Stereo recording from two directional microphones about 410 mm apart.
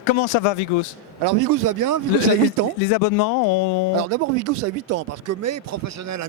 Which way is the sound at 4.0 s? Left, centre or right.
Right.